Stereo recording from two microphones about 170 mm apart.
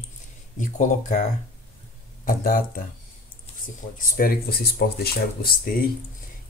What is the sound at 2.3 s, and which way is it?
Speech, 55° left (ahead or behind).